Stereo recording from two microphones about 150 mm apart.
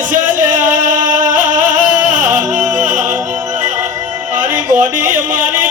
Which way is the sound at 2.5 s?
55° right (ahead or behind).